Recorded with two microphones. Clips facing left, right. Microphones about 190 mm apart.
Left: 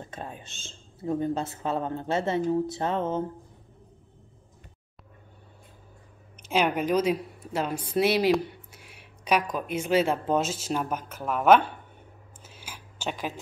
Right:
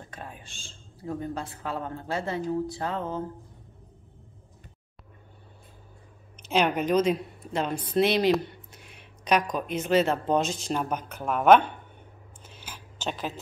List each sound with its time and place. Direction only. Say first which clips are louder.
0.0 s speech: left 3 dB; 25° left (ahead or behind)
6.4 s a woman's voice: even; 10° left (ahead or behind)
12.4 s a sound: even; 10° left (ahead or behind)